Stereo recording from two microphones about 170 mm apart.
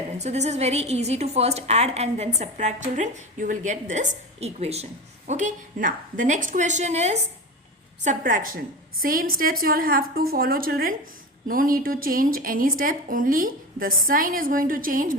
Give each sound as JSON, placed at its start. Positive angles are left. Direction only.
{"t": 0.2, "sound": "a woman's voice", "side_deg": -40}
{"t": 8.0, "sound": "a woman's voice", "side_deg": -50}